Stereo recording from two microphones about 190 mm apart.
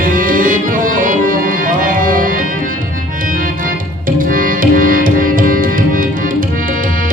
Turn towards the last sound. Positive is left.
turn(degrees=-45)  # may be behind; listen again after turning